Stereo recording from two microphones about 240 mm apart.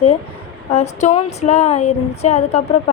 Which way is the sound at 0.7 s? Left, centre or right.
Left.